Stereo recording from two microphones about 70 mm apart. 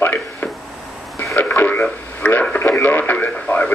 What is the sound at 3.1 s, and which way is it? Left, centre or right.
Speech, left.